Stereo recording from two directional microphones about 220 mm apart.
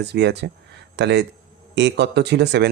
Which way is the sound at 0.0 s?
50° right (ahead or behind).